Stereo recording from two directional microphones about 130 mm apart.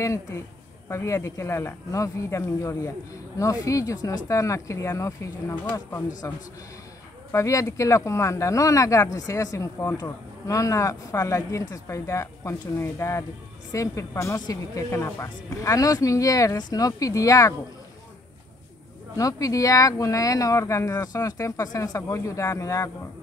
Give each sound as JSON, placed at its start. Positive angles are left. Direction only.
{"t": 0.8, "sound": "speech", "side_deg": 20}
{"t": 7.3, "sound": "speech", "side_deg": 25}
{"t": 19.1, "sound": "speech", "side_deg": 25}